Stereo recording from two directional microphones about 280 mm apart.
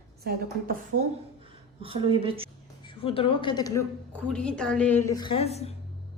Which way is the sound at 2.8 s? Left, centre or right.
Centre.